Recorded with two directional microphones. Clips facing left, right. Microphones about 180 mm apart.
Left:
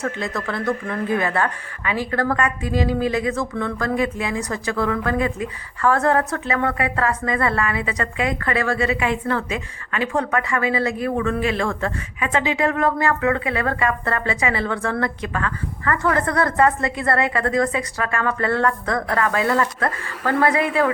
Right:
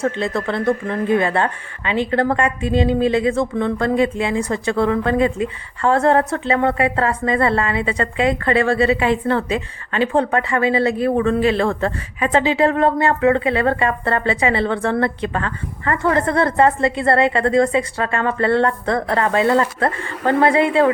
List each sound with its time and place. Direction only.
0.0 s speech: 30° right (ahead or behind)